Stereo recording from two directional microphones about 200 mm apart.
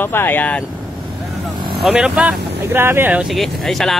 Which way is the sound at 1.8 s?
5° right (ahead or behind).